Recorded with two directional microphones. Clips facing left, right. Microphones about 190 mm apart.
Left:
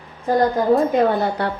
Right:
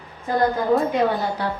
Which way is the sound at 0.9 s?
60° left (ahead or behind).